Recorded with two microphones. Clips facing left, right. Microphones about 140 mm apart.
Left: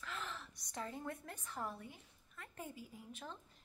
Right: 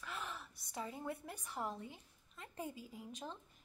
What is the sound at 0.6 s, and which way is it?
A woman's voice, 5° right (ahead or behind).